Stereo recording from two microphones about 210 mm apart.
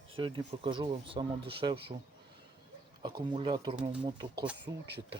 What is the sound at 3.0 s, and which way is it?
Speech, 20° right (ahead or behind).